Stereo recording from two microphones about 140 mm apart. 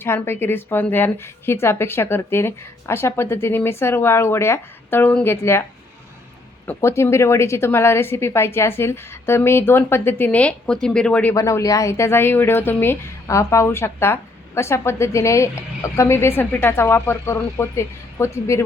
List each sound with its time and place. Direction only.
0.0 s a woman's voice: 15° left (ahead or behind)
6.7 s a woman's voice: 20° left (ahead or behind)
11.3 s speech: 20° left (ahead or behind)